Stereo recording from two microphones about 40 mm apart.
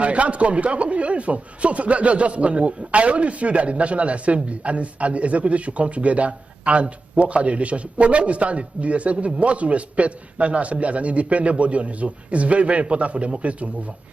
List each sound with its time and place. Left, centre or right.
0.0 s a man's voice: right